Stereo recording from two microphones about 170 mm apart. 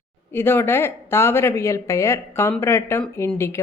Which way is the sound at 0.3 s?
15° left (ahead or behind).